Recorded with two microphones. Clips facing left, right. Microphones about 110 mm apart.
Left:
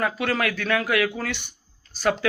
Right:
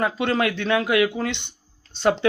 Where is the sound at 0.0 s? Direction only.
25° right (ahead or behind).